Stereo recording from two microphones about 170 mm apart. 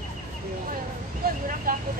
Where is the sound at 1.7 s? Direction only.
55° right (ahead or behind).